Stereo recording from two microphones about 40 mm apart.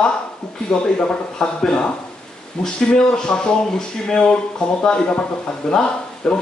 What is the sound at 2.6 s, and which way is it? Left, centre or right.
A man's voice, left.